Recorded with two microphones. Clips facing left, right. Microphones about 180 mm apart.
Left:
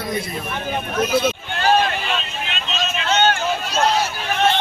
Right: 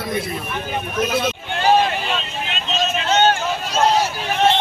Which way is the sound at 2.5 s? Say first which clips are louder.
Right 4 dB; 40° right (ahead or behind).